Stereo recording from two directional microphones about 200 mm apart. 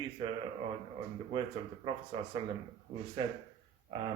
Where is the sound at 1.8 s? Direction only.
25° right (ahead or behind).